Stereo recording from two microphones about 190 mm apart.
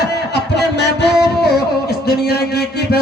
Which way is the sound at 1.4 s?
55° left (ahead or behind).